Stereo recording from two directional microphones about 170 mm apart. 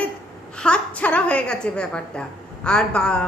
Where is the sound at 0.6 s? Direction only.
5° left (ahead or behind).